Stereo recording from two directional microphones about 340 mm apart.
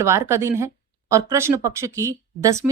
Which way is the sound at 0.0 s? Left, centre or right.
Centre.